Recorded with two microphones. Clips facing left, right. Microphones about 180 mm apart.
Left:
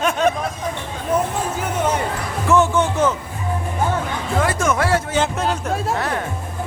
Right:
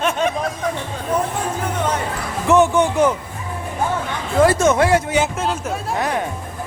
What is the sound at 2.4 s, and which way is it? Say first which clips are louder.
Speech: right 2 dB; 15° right (ahead or behind).